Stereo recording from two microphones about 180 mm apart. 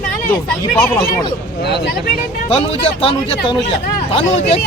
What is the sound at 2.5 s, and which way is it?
Speech, 30° left (ahead or behind).